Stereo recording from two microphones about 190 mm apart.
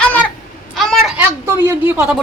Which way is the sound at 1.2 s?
10° right (ahead or behind).